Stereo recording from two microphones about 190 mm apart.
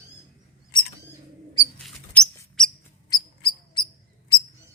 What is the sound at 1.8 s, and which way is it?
Squeak, 5° left (ahead or behind).